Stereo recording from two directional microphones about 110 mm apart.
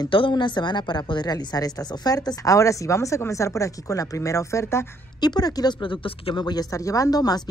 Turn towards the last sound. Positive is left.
turn(degrees=35)  # may be behind; listen again after turning